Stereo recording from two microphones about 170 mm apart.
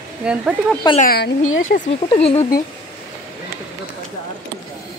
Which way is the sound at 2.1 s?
35° left (ahead or behind).